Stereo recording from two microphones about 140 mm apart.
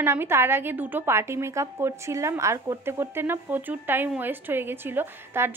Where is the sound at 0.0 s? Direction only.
20° right (ahead or behind).